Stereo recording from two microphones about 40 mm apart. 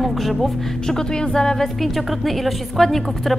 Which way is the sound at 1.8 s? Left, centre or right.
Centre.